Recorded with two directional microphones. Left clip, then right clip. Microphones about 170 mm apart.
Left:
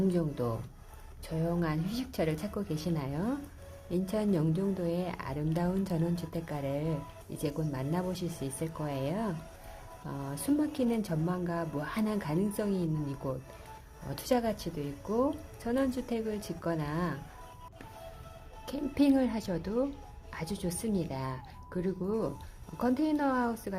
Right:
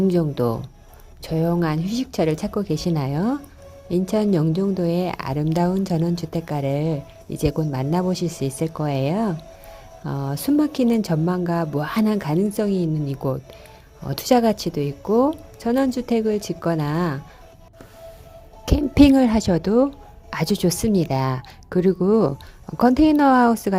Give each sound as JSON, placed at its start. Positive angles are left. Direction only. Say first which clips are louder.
{"t": 0.1, "sound": "a woman's voice", "louder": "right 12 dB", "side_deg": -45}
{"t": 18.6, "sound": "a woman's voice", "louder": "right 14 dB", "side_deg": -50}